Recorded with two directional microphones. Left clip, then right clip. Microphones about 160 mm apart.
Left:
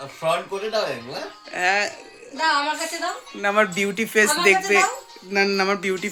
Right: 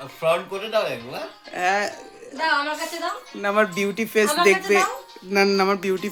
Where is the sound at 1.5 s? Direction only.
20° right (ahead or behind).